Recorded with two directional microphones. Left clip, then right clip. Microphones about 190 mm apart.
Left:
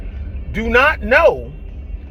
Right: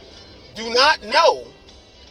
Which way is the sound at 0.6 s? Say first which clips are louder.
Left 3 dB; 30° left (ahead or behind).